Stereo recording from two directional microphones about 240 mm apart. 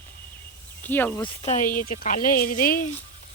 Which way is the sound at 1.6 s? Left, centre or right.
Left.